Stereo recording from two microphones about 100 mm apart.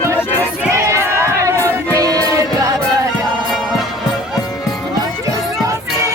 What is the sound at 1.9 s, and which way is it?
Music, 35° right (ahead or behind).